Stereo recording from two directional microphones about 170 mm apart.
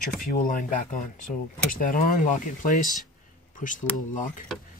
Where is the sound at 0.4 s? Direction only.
50° left (ahead or behind).